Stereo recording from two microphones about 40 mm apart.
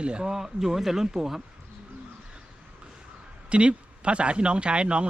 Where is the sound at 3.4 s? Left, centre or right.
Right.